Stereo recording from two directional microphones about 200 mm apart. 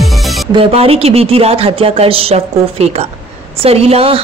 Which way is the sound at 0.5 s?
25° right (ahead or behind).